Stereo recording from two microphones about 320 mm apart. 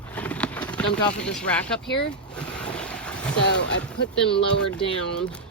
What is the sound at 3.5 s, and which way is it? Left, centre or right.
Speech, left.